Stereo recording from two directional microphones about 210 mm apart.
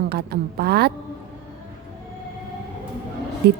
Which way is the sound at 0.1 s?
50° right (ahead or behind).